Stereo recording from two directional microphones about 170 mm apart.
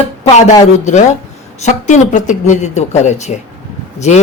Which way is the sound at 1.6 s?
45° left (ahead or behind).